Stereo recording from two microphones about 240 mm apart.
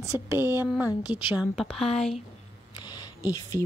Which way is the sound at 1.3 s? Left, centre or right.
Centre.